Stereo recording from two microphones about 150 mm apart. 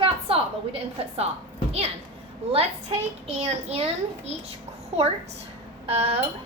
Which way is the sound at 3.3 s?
45° right (ahead or behind).